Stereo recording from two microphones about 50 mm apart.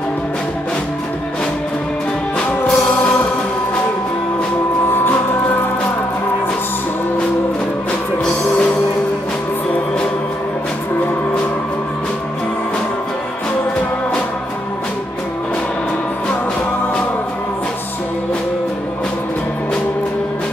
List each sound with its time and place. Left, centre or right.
2.3 s music: centre